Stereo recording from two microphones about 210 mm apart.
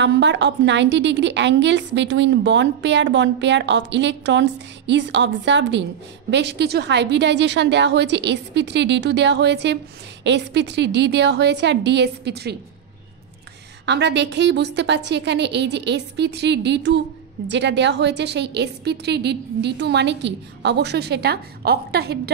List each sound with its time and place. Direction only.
0.0 s a woman's voice: 55° right (ahead or behind)
13.8 s a woman's voice: 55° right (ahead or behind)